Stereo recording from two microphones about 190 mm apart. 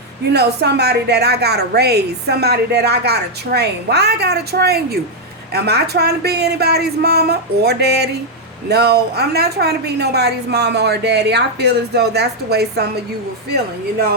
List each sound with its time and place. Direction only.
0.3 s a woman's voice: 60° right (ahead or behind)